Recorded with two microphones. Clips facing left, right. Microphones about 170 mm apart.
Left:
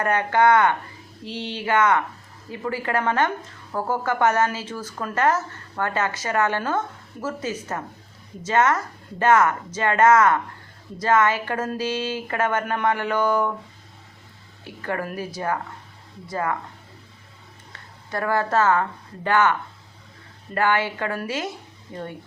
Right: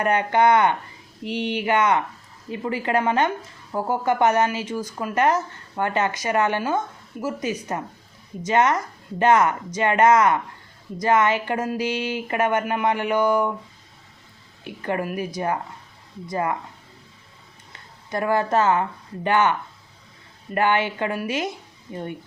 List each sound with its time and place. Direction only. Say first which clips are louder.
0.0 s a woman's voice: right 1 dB; 20° right (ahead or behind)
14.6 s a woman's voice: right 2 dB; 20° right (ahead or behind)
17.7 s a woman's voice: right 2 dB; 20° right (ahead or behind)